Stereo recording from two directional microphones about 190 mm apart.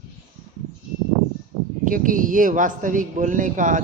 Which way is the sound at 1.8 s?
45° right (ahead or behind).